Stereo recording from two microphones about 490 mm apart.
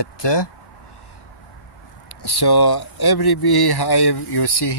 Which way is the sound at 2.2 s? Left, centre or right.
Left.